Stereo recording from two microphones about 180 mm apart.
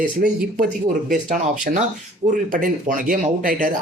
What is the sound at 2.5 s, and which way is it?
Speech, 50° right (ahead or behind).